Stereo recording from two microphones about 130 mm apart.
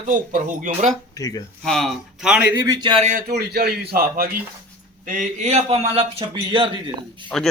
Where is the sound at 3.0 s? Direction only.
75° right (ahead or behind).